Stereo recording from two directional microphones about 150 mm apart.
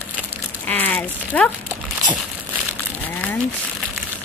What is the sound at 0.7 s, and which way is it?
Speech, 10° left (ahead or behind).